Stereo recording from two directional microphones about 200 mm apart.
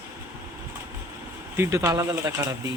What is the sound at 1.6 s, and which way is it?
Speech, 15° right (ahead or behind).